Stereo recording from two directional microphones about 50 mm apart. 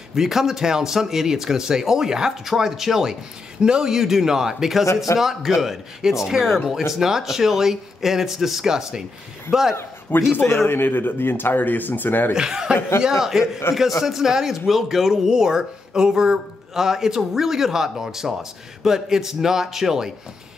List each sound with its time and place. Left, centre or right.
0.1 s speech: centre
4.8 s a man's voice: left
5.2 s speech: centre
10.3 s speech: left
12.4 s speech: centre